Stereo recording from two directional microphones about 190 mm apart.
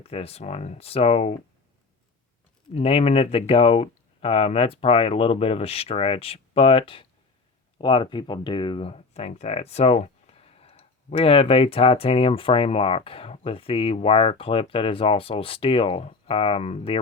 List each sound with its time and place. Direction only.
0.0 s speech: 30° left (ahead or behind)
2.7 s speech: 35° left (ahead or behind)